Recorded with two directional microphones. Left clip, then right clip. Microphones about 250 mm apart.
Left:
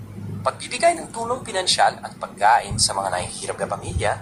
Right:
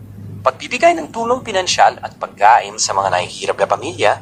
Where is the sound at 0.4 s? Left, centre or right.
Right.